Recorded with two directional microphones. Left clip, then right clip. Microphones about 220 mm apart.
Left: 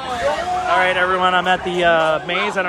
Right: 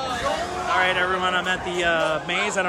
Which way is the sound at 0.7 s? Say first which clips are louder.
Left 4 dB; 5° right (ahead or behind).